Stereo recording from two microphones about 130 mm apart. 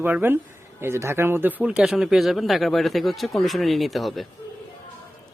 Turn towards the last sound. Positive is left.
turn(degrees=0)  # may be behind; listen again after turning